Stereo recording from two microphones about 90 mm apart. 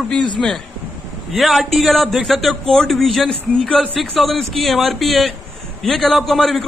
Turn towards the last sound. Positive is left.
turn(degrees=0)  # may be behind; listen again after turning